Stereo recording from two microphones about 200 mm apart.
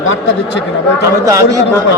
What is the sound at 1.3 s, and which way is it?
Speech, 15° right (ahead or behind).